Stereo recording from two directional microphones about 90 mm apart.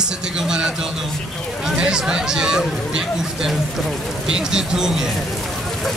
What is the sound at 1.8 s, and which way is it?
Speech, 10° right (ahead or behind).